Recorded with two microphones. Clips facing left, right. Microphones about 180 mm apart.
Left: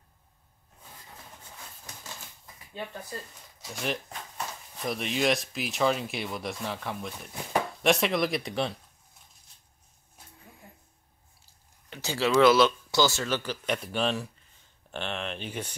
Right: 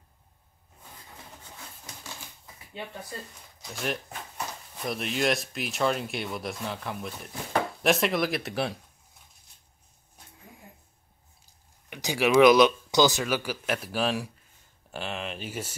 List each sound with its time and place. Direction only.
3.6 s speech: centre (ahead or behind)
11.4 s speech: 15° right (ahead or behind)